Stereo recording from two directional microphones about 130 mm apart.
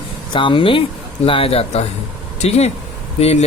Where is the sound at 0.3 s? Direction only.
40° left (ahead or behind).